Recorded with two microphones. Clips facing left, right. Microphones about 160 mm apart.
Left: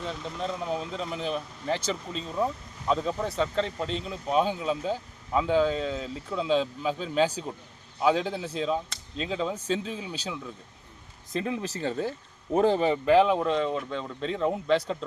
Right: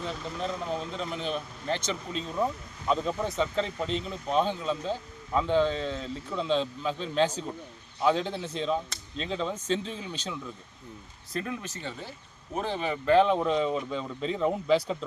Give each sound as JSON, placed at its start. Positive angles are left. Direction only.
{"t": 0.0, "sound": "speech", "side_deg": 0}
{"t": 11.3, "sound": "speech", "side_deg": 25}
{"t": 13.1, "sound": "speech", "side_deg": 5}